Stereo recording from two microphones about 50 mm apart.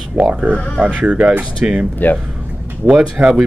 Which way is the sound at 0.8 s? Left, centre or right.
Right.